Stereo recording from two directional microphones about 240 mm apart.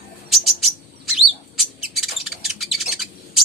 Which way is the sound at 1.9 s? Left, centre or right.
Centre.